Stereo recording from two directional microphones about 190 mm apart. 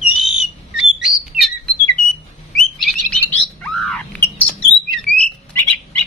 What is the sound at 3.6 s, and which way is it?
Squawk, centre (ahead or behind).